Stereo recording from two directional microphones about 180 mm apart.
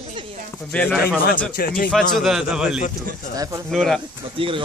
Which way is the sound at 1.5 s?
55° left (ahead or behind).